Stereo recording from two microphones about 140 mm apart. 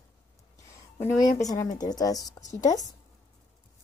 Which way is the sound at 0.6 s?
20° left (ahead or behind).